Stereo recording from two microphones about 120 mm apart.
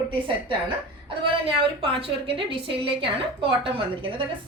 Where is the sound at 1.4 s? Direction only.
50° right (ahead or behind).